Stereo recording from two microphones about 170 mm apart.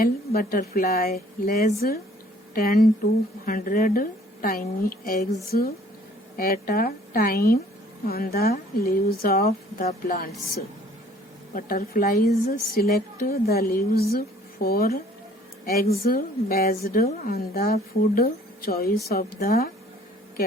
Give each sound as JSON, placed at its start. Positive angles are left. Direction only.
{"t": 0.0, "sound": "a woman's voice", "side_deg": 65}
{"t": 3.4, "sound": "a woman's voice", "side_deg": 55}